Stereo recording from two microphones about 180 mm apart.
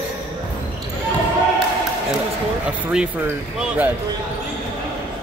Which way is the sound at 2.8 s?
5° right (ahead or behind).